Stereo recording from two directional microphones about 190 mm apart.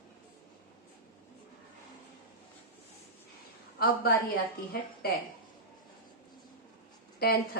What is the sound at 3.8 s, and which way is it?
Speech, 50° left (ahead or behind).